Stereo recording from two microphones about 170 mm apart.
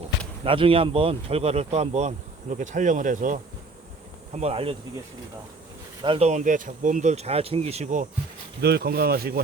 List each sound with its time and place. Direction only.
0.4 s speech: 30° right (ahead or behind); by 3.4 s 50° right (ahead or behind)
4.4 s speech: 35° right (ahead or behind)
6.0 s speech: 35° right (ahead or behind)
8.6 s speech: 70° right (ahead or behind)